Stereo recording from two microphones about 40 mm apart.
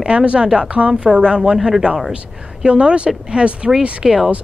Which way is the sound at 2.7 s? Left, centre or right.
Right.